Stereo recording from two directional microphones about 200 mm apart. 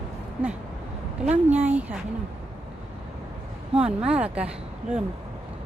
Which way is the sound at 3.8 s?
5° right (ahead or behind).